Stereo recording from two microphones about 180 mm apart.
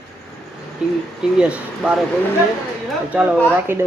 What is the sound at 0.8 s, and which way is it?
Speech, 5° right (ahead or behind).